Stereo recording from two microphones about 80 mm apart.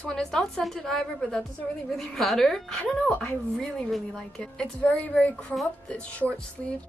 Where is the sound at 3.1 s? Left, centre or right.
Centre.